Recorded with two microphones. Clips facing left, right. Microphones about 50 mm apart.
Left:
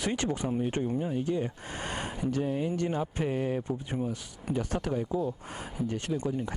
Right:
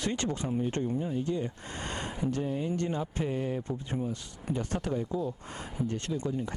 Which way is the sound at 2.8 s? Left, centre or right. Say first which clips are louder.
Left 2 dB; centre.